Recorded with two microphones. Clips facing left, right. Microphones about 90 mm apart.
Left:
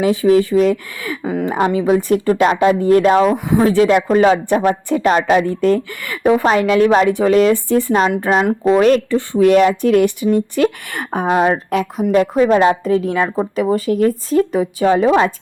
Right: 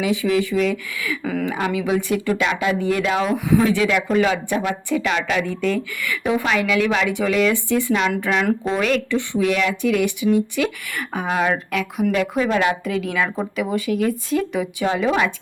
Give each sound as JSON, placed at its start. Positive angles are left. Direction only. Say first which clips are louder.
{"t": 0.0, "sound": "speech", "louder": "left 7 dB", "side_deg": 40}
{"t": 1.2, "sound": "speech", "louder": "left 5 dB", "side_deg": 25}
{"t": 1.7, "sound": "speech", "louder": "left 6 dB", "side_deg": 40}